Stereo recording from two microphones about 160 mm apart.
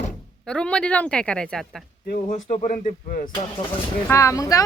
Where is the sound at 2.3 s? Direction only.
45° left (ahead or behind).